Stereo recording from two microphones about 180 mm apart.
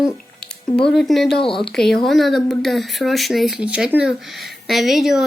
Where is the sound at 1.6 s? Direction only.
5° left (ahead or behind).